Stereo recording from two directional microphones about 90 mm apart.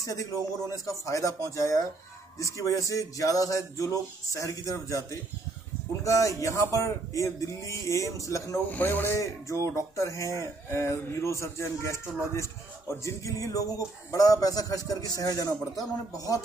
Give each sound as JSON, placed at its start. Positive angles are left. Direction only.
{"t": 0.0, "sound": "speech", "side_deg": 35}
{"t": 6.0, "sound": "speech", "side_deg": 35}
{"t": 8.6, "sound": "speech", "side_deg": 20}